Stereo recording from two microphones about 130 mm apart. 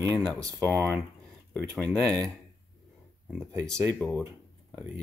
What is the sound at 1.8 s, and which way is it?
Speech, 10° left (ahead or behind).